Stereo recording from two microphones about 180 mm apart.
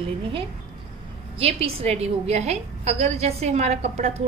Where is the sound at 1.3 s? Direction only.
30° right (ahead or behind).